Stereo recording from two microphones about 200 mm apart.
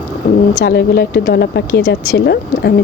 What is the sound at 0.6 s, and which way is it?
A woman's voice, 50° left (ahead or behind).